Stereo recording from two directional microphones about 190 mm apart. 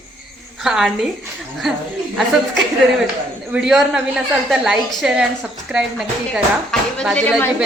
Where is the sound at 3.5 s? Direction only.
Centre (ahead or behind).